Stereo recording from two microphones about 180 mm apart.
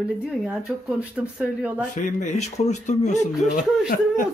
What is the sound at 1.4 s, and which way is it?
Speech, 5° right (ahead or behind).